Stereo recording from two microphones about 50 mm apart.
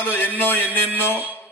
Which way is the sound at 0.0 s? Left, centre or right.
Left.